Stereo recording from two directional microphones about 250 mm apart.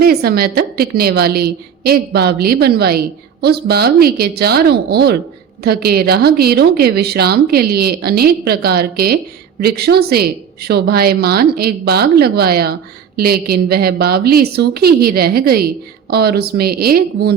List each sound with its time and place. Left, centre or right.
0.0 s a woman's voice: right